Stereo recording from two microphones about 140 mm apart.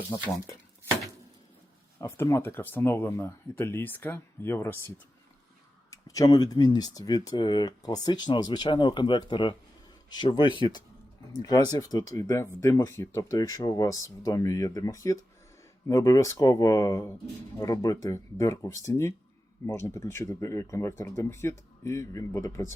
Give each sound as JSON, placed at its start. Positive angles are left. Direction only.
{"t": 2.0, "sound": "speech", "side_deg": 20}
{"t": 5.9, "sound": "speech", "side_deg": 25}